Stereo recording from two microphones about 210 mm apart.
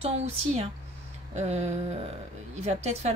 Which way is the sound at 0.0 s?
30° right (ahead or behind).